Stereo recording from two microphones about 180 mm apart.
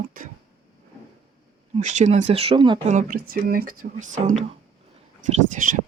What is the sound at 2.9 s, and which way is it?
Speech, 45° right (ahead or behind).